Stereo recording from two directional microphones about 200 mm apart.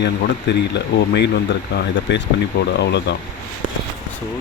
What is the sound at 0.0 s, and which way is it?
Speech, 60° left (ahead or behind).